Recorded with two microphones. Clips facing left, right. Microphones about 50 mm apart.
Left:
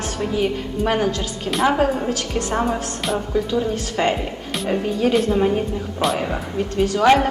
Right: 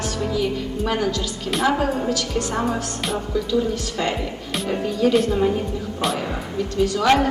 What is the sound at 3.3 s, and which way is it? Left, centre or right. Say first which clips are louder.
Speech: right 1 dB; left.